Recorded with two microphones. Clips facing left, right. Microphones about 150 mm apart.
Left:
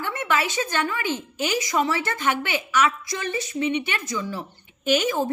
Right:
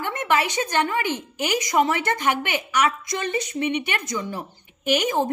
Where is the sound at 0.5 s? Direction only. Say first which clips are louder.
Right 3 dB; 20° right (ahead or behind).